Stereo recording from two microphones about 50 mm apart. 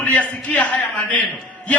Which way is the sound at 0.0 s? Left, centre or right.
Left.